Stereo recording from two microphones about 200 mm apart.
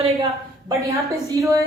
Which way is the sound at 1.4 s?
15° right (ahead or behind).